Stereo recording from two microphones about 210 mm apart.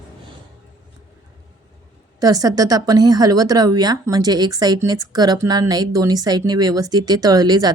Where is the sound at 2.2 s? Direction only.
15° right (ahead or behind).